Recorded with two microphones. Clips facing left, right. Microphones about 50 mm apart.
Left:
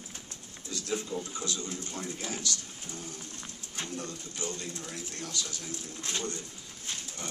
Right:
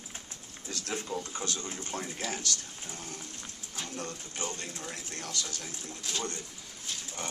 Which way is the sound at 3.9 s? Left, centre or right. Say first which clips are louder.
Even; right.